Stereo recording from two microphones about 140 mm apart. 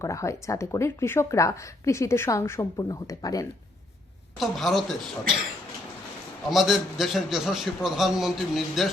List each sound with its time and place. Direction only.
0.0 s speech: 20° left (ahead or behind)
4.4 s a man's voice: centre (ahead or behind)
6.5 s a man's voice: centre (ahead or behind)